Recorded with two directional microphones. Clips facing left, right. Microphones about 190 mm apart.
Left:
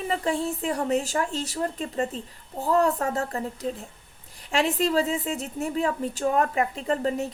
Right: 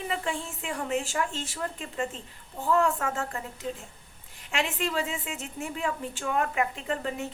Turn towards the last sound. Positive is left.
turn(degrees=40)  # may be behind; listen again after turning